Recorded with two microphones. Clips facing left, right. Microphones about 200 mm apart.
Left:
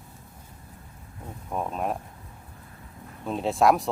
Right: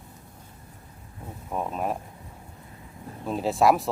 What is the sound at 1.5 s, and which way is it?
Speech, centre (ahead or behind).